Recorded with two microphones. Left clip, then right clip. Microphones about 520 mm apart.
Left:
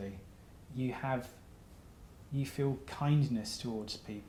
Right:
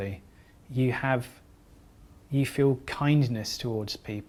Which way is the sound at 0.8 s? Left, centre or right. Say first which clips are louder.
Right 9 dB; right.